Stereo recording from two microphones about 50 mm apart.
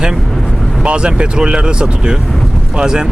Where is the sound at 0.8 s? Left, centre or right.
Right.